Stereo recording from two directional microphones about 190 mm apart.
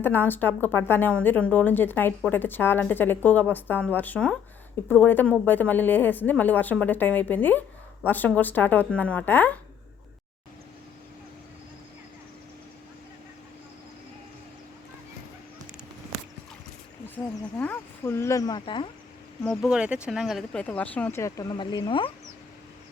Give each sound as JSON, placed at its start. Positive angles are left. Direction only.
{"t": 0.0, "sound": "speech", "side_deg": 10}
{"t": 17.6, "sound": "speech", "side_deg": 10}
{"t": 19.5, "sound": "speech", "side_deg": -5}